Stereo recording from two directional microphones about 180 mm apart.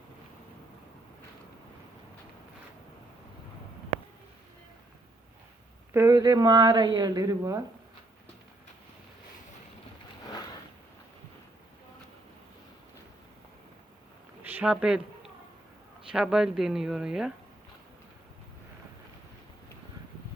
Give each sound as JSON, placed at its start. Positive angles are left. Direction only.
{"t": 5.9, "sound": "a woman's voice", "side_deg": -15}
{"t": 14.4, "sound": "speech", "side_deg": -10}